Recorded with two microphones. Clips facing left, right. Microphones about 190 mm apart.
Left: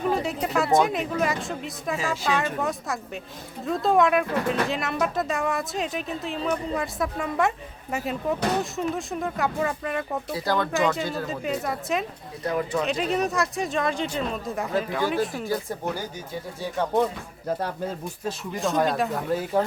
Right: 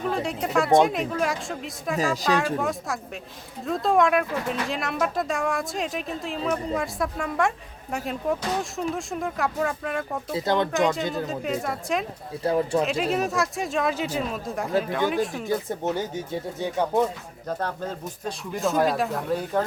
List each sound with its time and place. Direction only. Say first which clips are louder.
0.1 s speech: right 2 dB; centre (ahead or behind)
10.3 s speech: right 3 dB; 20° right (ahead or behind)
10.7 s speech: right 1 dB; centre (ahead or behind)
12.4 s speech: right 3 dB; 30° right (ahead or behind)
12.8 s speech: even; centre (ahead or behind)
15.4 s speech: right 2 dB; 20° right (ahead or behind)
18.3 s speech: right 1 dB; centre (ahead or behind)